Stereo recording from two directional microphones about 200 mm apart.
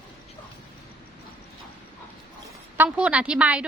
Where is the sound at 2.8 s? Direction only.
5° right (ahead or behind).